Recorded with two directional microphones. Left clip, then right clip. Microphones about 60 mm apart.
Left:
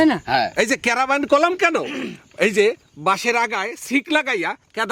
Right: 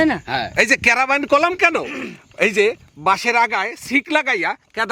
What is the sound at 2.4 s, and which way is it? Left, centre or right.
Speech, centre.